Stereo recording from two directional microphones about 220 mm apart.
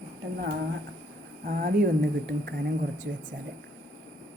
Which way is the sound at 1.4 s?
40° right (ahead or behind).